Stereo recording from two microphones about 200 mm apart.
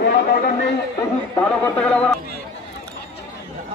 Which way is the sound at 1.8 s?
5° left (ahead or behind).